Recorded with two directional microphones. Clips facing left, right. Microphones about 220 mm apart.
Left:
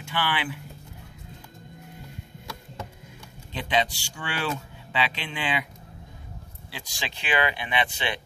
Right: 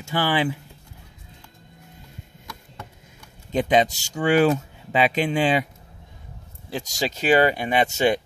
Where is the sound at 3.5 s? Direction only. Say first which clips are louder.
Right 7 dB; 45° right (ahead or behind).